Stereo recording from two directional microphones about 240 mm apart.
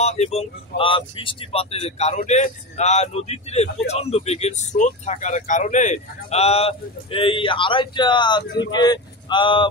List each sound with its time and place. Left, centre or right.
0.0 s speech: left